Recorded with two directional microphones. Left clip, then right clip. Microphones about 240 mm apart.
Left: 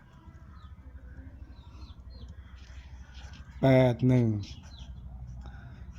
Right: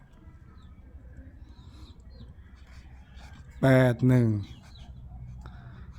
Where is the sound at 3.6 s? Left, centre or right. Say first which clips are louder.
Right 1 dB; centre.